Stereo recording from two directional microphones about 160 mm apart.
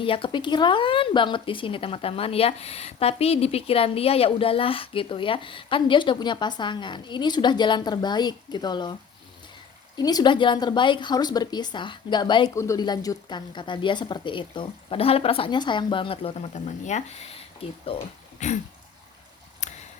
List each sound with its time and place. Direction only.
0.0 s speech: 35° left (ahead or behind)
10.0 s a woman's voice: 25° left (ahead or behind)
18.3 s a sound: 45° left (ahead or behind)